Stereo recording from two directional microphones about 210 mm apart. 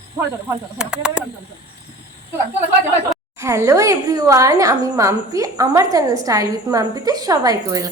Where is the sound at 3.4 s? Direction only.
15° right (ahead or behind).